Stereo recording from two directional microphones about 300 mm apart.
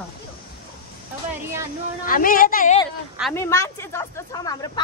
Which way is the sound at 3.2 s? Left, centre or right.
Centre.